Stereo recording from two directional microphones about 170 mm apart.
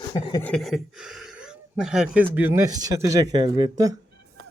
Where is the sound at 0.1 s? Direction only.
25° left (ahead or behind).